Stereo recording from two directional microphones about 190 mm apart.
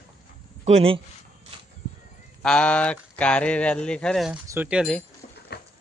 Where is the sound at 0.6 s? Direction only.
30° right (ahead or behind).